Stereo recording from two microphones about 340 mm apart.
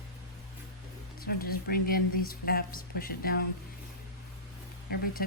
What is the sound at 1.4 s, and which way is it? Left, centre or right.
Speech, left.